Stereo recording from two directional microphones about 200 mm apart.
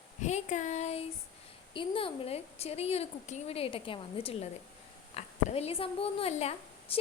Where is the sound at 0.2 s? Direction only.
35° left (ahead or behind).